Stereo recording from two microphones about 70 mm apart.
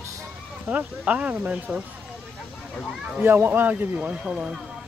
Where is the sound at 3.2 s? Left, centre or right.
Right.